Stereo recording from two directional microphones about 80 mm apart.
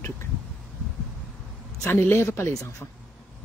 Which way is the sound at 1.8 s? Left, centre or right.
Left.